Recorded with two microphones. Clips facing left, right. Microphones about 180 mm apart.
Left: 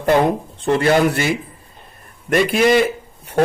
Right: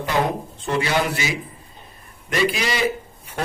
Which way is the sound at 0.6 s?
55° left (ahead or behind).